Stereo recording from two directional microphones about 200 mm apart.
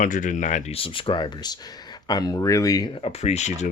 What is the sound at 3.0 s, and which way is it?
Speech, 35° left (ahead or behind).